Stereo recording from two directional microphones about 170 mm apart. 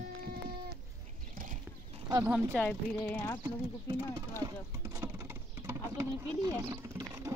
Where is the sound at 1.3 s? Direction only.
50° right (ahead or behind).